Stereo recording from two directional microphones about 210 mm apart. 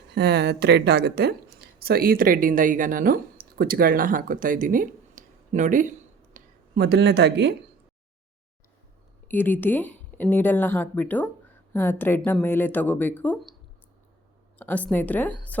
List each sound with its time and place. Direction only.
0.1 s speech: 50° right (ahead or behind); by 5.9 s 35° right (ahead or behind)
6.3 s speech: 50° right (ahead or behind)
9.2 s a woman's voice: 10° left (ahead or behind)
14.6 s a woman's voice: 10° left (ahead or behind)